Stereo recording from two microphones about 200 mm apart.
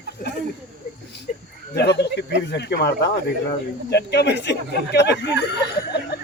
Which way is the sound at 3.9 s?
55° left (ahead or behind).